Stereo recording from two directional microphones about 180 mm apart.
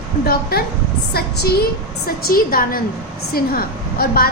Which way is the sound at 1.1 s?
60° left (ahead or behind).